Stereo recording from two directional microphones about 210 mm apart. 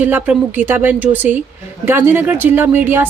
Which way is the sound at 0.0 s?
10° right (ahead or behind).